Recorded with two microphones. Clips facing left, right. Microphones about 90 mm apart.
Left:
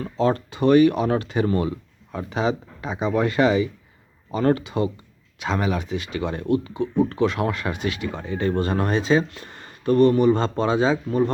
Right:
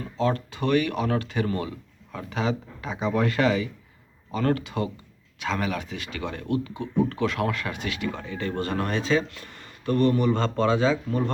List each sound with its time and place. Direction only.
0.2 s speech: 30° left (ahead or behind)